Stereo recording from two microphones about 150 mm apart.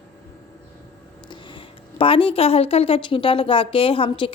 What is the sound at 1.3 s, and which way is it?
Speech, 35° left (ahead or behind).